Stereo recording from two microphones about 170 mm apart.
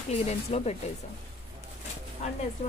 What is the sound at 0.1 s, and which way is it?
Speech, 40° left (ahead or behind).